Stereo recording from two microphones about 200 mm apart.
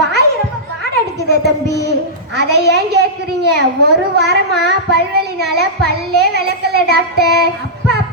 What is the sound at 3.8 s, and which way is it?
Child singing, 55° right (ahead or behind).